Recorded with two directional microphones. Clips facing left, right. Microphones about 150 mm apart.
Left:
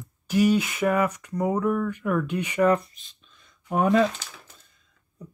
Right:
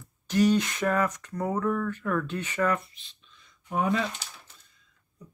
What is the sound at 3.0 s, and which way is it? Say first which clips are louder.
Speech: left 1 dB; 45° left (ahead or behind).